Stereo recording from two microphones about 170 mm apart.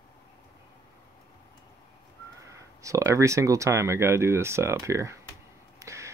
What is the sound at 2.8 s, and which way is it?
Speech, 20° right (ahead or behind).